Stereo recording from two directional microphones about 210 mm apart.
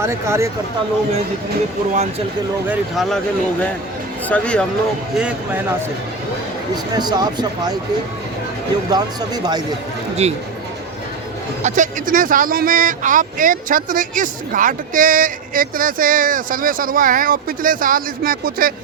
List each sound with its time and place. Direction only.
0.0 s speech: 15° right (ahead or behind)
1.9 s speech: 30° right (ahead or behind)
2.6 s speech: centre (ahead or behind)
4.3 s speech: 5° left (ahead or behind)
6.9 s speech: 20° right (ahead or behind)
8.9 s speech: 20° right (ahead or behind)
10.2 s speech: 30° right (ahead or behind)
11.6 s speech: 35° right (ahead or behind)